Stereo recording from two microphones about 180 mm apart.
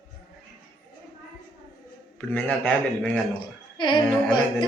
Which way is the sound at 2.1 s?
5° left (ahead or behind).